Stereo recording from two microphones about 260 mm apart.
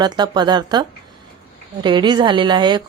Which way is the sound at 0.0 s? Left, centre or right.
Centre.